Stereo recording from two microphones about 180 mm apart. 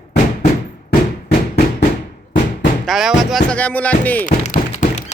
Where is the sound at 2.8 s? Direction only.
Centre (ahead or behind).